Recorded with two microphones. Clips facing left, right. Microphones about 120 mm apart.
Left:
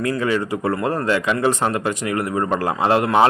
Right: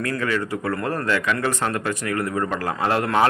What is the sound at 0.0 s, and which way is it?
A man's voice, 20° left (ahead or behind).